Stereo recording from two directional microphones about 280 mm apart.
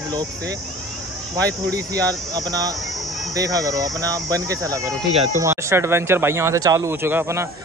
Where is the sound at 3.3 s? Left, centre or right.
Centre.